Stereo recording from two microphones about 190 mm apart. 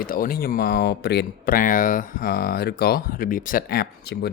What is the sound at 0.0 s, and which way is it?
Speech, 50° left (ahead or behind).